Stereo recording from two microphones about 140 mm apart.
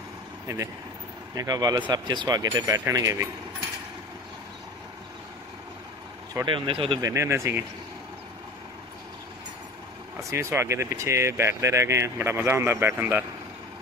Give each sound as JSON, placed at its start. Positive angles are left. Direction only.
{"t": 0.5, "sound": "speech", "side_deg": -25}
{"t": 6.4, "sound": "speech", "side_deg": -35}
{"t": 7.0, "sound": "speech", "side_deg": -20}
{"t": 10.3, "sound": "speech", "side_deg": -20}